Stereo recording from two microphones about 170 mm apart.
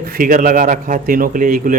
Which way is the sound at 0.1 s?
55° right (ahead or behind).